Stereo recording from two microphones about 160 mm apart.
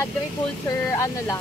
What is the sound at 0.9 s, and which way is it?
Speech, 20° left (ahead or behind).